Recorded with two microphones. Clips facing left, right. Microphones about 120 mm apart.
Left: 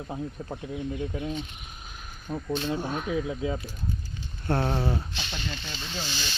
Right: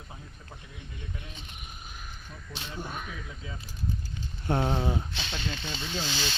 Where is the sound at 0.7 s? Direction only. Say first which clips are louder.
Left 13 dB; 50° left (ahead or behind).